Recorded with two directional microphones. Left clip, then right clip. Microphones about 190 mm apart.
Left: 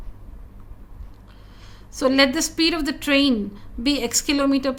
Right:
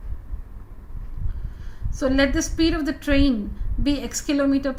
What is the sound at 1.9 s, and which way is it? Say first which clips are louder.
A woman's voice: left 3 dB; 60° left (ahead or behind).